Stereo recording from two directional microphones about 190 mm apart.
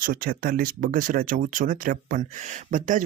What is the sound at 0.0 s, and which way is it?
Speech, 50° right (ahead or behind).